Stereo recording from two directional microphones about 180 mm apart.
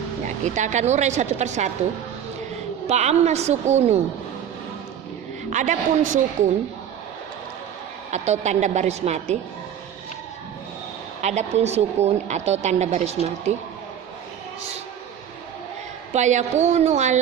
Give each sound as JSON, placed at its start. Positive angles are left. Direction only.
{"t": 0.4, "sound": "a woman's voice", "side_deg": -40}
{"t": 2.8, "sound": "a woman's voice", "side_deg": -40}
{"t": 5.5, "sound": "a woman's voice", "side_deg": -45}
{"t": 8.1, "sound": "a woman's voice", "side_deg": -40}
{"t": 11.2, "sound": "a woman's voice", "side_deg": -40}
{"t": 16.1, "sound": "a woman's voice", "side_deg": -40}